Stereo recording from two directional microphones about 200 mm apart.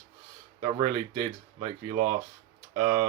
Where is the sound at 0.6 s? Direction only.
20° right (ahead or behind).